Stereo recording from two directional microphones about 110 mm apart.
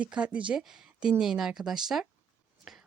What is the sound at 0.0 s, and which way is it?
A woman's voice, 10° right (ahead or behind).